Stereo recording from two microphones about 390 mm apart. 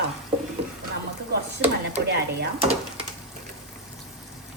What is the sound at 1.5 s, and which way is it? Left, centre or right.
Speech, right.